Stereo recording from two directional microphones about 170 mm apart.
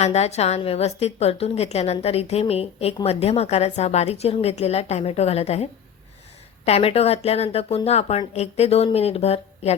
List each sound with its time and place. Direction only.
0.0 s a woman's voice: 40° left (ahead or behind)
6.7 s a woman's voice: 35° left (ahead or behind)